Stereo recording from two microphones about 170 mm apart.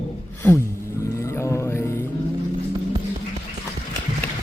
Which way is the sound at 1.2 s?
15° left (ahead or behind).